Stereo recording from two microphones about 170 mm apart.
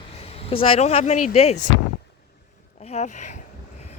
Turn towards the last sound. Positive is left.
turn(degrees=45)  # may be behind; listen again after turning